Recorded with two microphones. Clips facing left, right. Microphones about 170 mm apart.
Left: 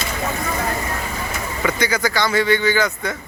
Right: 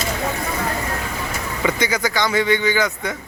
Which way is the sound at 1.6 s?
20° right (ahead or behind).